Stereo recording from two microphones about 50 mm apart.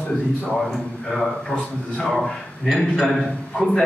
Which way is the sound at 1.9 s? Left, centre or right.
Centre.